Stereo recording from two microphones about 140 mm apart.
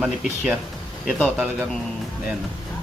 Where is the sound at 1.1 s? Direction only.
5° left (ahead or behind).